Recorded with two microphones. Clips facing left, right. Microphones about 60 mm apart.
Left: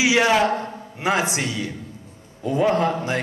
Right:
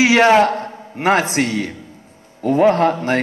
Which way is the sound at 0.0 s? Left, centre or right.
Right.